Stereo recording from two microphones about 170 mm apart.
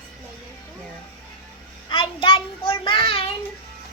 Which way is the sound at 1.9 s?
30° left (ahead or behind).